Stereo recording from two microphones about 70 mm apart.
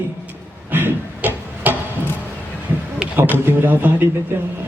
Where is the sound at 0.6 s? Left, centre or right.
Right.